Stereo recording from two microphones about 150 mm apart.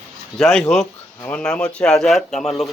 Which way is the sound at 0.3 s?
Centre (ahead or behind).